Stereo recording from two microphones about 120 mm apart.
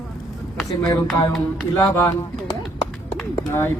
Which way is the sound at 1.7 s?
20° left (ahead or behind).